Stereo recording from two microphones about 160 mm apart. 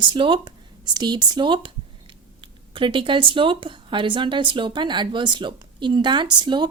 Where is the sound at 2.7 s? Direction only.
30° right (ahead or behind).